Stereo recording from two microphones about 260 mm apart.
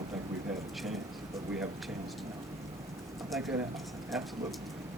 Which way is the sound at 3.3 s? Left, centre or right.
Centre.